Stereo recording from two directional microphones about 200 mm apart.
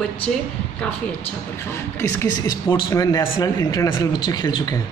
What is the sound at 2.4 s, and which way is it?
Speech, 20° left (ahead or behind).